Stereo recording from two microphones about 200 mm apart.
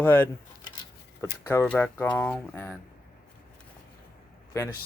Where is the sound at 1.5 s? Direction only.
10° left (ahead or behind).